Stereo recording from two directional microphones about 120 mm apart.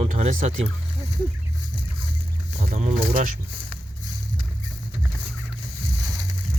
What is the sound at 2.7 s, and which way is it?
Speech, 80° right.